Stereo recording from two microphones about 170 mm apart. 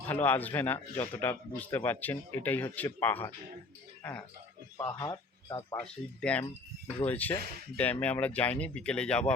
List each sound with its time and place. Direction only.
0.1 s speech: 10° left (ahead or behind)
4.8 s speech: 20° left (ahead or behind)
5.8 s speech: 5° left (ahead or behind)